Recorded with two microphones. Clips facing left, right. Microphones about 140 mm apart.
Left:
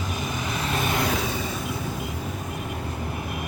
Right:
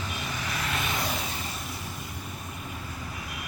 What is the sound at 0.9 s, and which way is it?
Vehicle, 65° left (ahead or behind).